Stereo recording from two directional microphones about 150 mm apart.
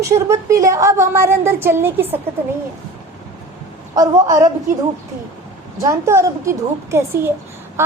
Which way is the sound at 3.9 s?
25° right (ahead or behind).